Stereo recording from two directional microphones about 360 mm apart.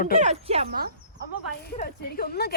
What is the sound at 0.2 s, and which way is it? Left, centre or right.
Speech, centre.